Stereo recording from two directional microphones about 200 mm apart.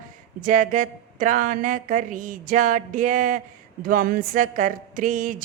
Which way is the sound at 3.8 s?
45° right (ahead or behind).